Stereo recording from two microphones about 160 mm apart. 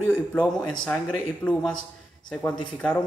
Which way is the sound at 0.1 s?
10° left (ahead or behind).